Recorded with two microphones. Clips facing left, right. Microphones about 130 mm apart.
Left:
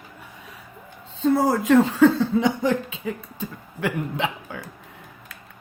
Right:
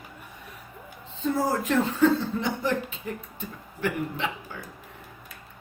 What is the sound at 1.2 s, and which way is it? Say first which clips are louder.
Speech: left 6 dB; 90° left.